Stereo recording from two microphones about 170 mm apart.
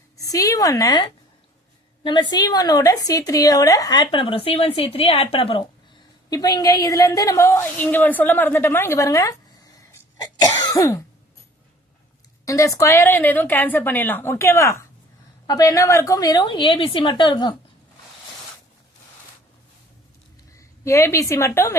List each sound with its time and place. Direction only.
0.2 s a woman's voice: 20° left (ahead or behind)
6.3 s a woman's voice: 20° left (ahead or behind)
10.4 s cough: 20° left (ahead or behind)
12.5 s a woman's voice: 20° left (ahead or behind)
20.6 s a woman's voice: 15° left (ahead or behind)